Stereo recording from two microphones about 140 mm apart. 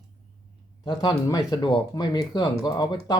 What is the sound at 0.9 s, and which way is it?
Speech, 30° left (ahead or behind).